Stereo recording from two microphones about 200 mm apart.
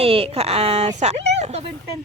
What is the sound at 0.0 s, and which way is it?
Speech, 30° right (ahead or behind).